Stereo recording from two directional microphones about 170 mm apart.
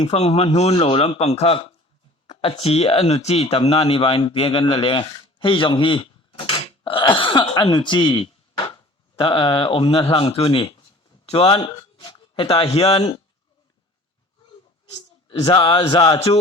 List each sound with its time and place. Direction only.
0.0 s speech: 40° left (ahead or behind)
13.0 s speech: 25° left (ahead or behind)
15.5 s speech: 30° left (ahead or behind)